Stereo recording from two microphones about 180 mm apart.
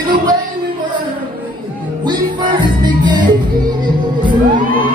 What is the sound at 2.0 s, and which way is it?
Music, 25° right (ahead or behind).